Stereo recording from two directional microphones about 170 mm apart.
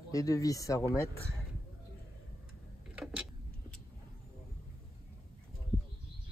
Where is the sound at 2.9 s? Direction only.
5° right (ahead or behind).